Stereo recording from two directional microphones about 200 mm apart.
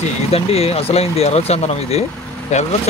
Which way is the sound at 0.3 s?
30° left (ahead or behind).